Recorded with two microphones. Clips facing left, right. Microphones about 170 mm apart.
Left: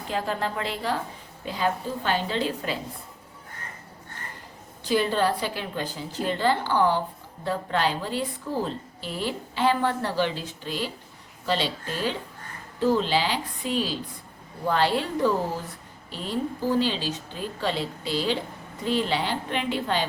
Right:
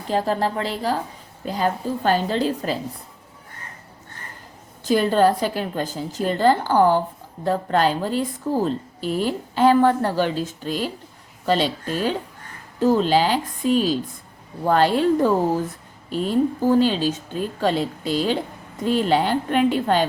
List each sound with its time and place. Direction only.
0.1 s a woman's voice: 35° right (ahead or behind)
4.9 s a woman's voice: 45° right (ahead or behind)